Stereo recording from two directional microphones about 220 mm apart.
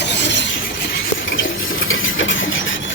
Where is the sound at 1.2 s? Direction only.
60° left (ahead or behind).